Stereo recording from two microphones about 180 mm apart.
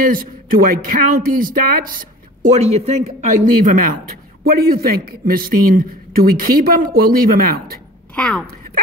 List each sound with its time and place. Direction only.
0.0 s a man's voice: 50° right (ahead or behind)
4.5 s speech: 55° right (ahead or behind)
8.2 s speech: 5° left (ahead or behind)